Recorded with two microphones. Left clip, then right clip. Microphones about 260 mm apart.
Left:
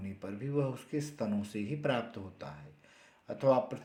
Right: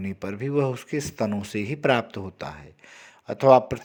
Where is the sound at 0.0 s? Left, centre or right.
Right.